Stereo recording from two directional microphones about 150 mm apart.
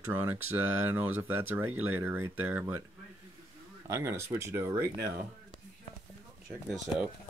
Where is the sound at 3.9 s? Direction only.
20° right (ahead or behind).